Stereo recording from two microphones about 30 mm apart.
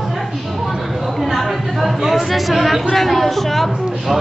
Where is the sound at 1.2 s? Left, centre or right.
Centre.